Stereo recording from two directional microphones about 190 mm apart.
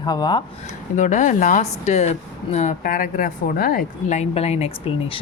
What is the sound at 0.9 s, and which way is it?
A woman's voice, 40° left (ahead or behind).